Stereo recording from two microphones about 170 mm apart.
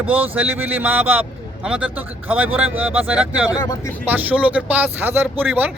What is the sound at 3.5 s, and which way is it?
Speech, 20° left (ahead or behind).